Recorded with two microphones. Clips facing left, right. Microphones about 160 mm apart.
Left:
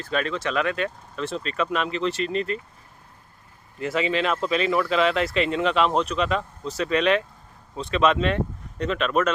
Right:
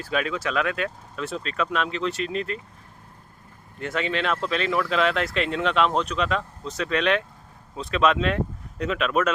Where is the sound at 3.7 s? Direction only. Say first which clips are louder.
Left 3 dB; centre (ahead or behind).